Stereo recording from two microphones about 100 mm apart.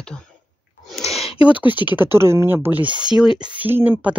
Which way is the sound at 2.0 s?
25° right (ahead or behind).